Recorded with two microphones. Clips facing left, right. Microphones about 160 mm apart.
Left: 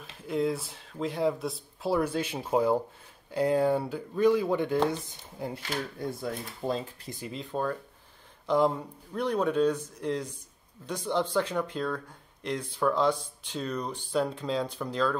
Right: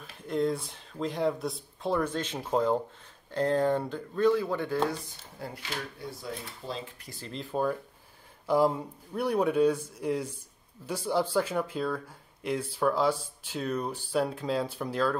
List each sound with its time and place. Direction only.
0.3 s speech: 5° left (ahead or behind)
6.0 s speech: 50° left (ahead or behind)
7.1 s speech: 15° left (ahead or behind)
7.3 s speech: 5° right (ahead or behind)